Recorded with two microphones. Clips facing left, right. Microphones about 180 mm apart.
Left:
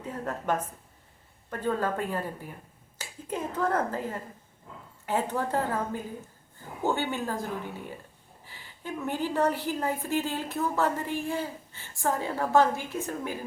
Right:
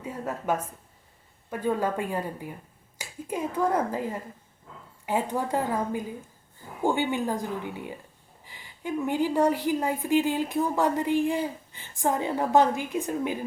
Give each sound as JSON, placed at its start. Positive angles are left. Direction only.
{"t": 0.0, "sound": "a woman's voice", "side_deg": -10}